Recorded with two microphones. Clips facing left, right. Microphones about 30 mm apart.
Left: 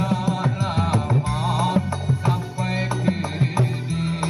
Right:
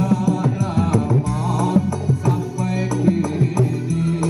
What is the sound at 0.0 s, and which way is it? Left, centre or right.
Music, left.